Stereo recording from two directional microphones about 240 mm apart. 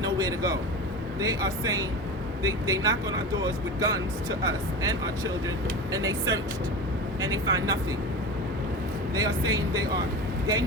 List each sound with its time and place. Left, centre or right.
0.0 s speech: centre
9.1 s speech: centre